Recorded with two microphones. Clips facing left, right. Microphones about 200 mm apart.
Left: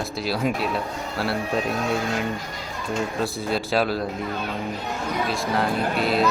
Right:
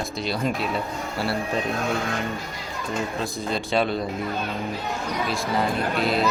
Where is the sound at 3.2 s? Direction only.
5° left (ahead or behind).